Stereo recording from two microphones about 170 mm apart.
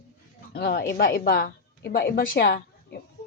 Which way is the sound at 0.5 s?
65° left (ahead or behind).